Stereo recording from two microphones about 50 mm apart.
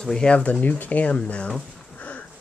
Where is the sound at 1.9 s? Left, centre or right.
Left.